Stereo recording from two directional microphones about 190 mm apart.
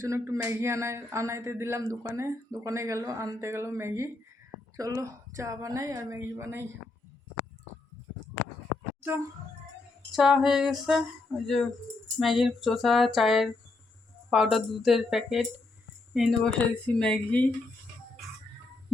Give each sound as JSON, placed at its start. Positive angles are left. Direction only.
{"t": 0.0, "sound": "speech", "side_deg": -15}
{"t": 10.1, "sound": "speech", "side_deg": 0}